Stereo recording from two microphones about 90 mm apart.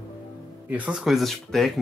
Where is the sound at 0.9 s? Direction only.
5° right (ahead or behind).